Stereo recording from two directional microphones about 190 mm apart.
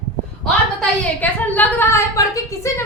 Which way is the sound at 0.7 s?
10° left (ahead or behind).